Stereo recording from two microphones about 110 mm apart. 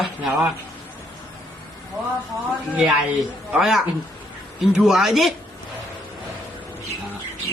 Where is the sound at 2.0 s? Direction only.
20° right (ahead or behind).